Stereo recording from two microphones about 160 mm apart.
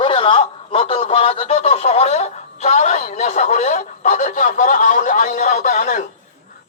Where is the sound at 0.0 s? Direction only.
35° left (ahead or behind).